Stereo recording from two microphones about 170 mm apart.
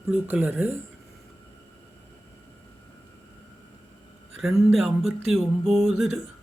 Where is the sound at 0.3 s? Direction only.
10° right (ahead or behind).